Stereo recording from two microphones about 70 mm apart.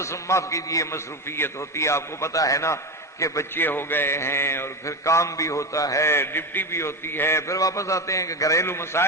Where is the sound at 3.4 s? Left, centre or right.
Left.